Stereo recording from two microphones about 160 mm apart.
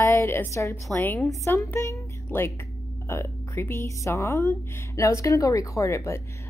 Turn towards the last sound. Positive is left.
turn(degrees=15)  # may be behind; listen again after turning